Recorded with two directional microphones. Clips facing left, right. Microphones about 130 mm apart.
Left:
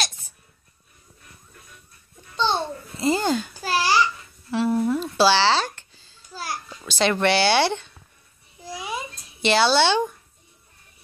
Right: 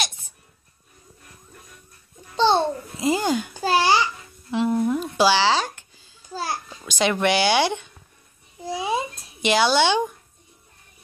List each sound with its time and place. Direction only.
2.3 s babbling: 30° right (ahead or behind)
3.0 s speech: 15° right (ahead or behind)
3.5 s babbling: 25° right (ahead or behind)
6.3 s a sound: 25° right (ahead or behind)
6.9 s speech: 10° right (ahead or behind)
8.6 s babbling: 25° right (ahead or behind)
9.4 s speech: 15° right (ahead or behind)